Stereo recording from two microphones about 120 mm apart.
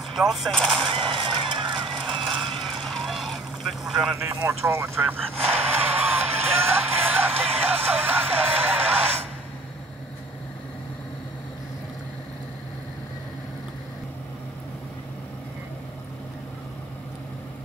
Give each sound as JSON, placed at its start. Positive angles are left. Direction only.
{"t": 0.1, "sound": "speech", "side_deg": 0}
{"t": 0.8, "sound": "a sound", "side_deg": -45}
{"t": 1.4, "sound": "goose", "side_deg": -45}
{"t": 2.0, "sound": "vehicle", "side_deg": 0}
{"t": 4.2, "sound": "speech", "side_deg": -20}
{"t": 5.6, "sound": "music", "side_deg": -15}